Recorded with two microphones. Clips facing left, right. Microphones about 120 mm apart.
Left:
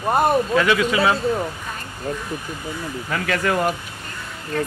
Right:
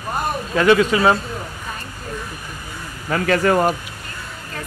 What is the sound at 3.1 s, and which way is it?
Speech, 35° right (ahead or behind).